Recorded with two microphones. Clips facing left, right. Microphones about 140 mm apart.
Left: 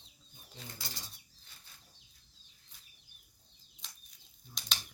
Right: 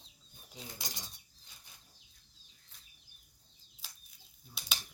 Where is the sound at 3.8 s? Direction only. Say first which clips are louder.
Even; 5° right (ahead or behind).